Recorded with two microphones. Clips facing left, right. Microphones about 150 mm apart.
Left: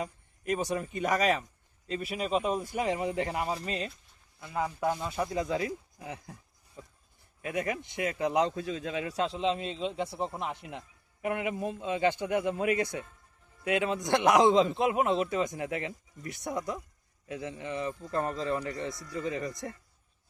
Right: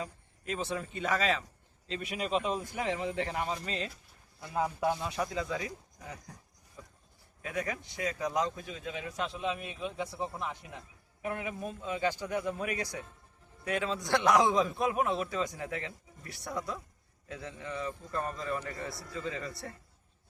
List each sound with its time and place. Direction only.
0.4 s a man's voice: 10° left (ahead or behind)
4.5 s speech: 15° right (ahead or behind)
4.9 s speech: 5° left (ahead or behind)
7.6 s a man's voice: 20° left (ahead or behind)
8.9 s a man's voice: 90° left
9.2 s a man's voice: 25° left (ahead or behind)
11.2 s speech: 65° left (ahead or behind)
11.6 s a man's voice: 25° left (ahead or behind)
11.9 s speech: 60° left (ahead or behind)
12.4 s a man's voice: 20° left (ahead or behind)